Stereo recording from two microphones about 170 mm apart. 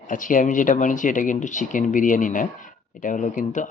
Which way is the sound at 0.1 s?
50° left (ahead or behind).